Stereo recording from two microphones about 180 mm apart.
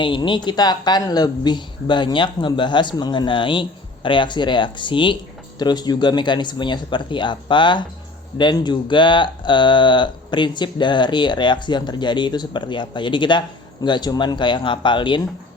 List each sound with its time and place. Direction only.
0.0 s speech: 25° left (ahead or behind)